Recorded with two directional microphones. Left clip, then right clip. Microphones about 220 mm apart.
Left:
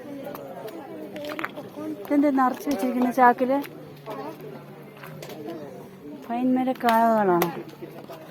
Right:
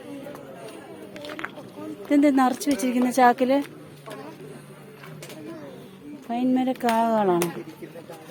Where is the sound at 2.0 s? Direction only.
20° right (ahead or behind).